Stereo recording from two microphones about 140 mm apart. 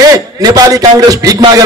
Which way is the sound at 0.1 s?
25° right (ahead or behind).